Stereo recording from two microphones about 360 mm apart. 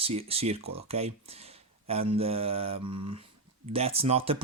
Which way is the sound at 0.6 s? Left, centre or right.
Right.